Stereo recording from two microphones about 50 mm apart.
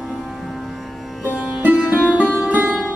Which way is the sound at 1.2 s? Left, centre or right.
Right.